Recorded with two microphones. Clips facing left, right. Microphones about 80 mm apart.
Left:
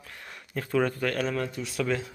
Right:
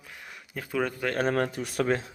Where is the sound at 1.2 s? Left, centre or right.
Right.